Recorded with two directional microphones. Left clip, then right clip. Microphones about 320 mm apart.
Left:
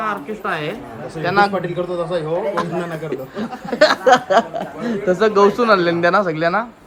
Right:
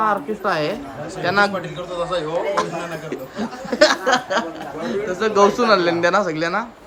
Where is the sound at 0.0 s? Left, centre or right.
Centre.